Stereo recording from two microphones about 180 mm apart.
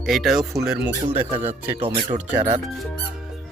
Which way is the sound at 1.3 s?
30° right (ahead or behind).